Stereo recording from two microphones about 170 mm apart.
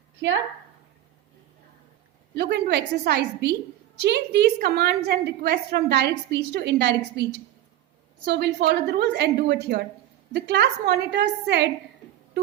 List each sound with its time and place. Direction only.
0.2 s a woman's voice: 90° right
2.3 s a woman's voice: 85° right
10.3 s a woman's voice: 80° right